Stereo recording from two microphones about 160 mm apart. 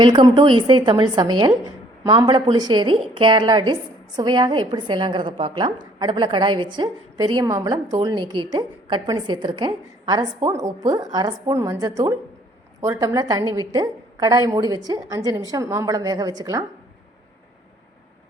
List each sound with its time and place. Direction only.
0.0 s a woman's voice: 30° right (ahead or behind)